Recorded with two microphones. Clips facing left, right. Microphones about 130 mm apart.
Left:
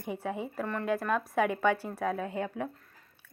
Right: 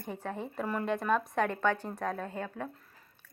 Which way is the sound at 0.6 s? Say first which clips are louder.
Right 2 dB; 10° right (ahead or behind).